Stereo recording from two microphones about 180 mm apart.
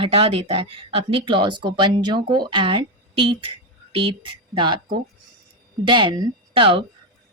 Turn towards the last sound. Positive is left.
turn(degrees=-30)  # may be behind; listen again after turning